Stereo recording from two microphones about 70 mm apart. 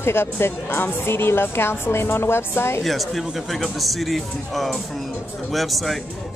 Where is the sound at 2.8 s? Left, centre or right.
Centre.